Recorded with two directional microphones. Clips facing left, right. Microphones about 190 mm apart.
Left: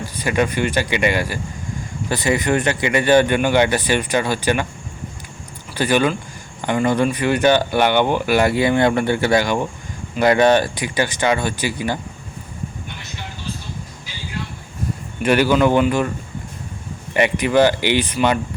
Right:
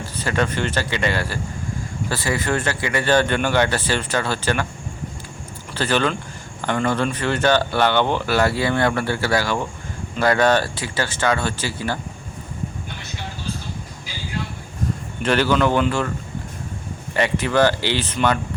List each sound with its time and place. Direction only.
0.0 s speech: 15° left (ahead or behind)
5.7 s speech: 15° left (ahead or behind)
15.2 s speech: 10° left (ahead or behind)
17.2 s speech: 15° left (ahead or behind)